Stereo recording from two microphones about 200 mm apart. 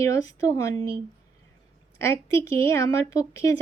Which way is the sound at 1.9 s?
15° left (ahead or behind).